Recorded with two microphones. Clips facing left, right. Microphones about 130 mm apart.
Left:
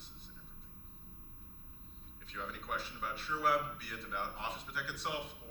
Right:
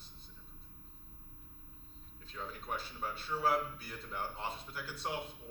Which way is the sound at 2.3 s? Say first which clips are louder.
Even; 25° right (ahead or behind).